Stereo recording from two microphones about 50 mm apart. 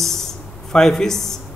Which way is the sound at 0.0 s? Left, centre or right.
Centre.